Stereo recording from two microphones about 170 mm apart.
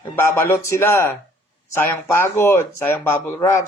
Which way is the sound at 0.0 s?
15° left (ahead or behind).